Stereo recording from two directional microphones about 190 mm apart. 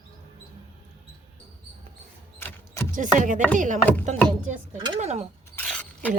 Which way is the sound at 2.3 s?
10° left (ahead or behind).